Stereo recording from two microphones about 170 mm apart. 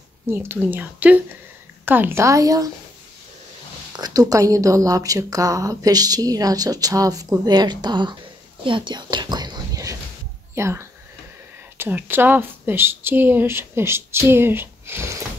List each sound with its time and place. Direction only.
0.3 s speech: 15° right (ahead or behind)
3.9 s speech: 20° right (ahead or behind)
8.6 s whispering: 30° right (ahead or behind)
10.5 s speech: 15° right (ahead or behind)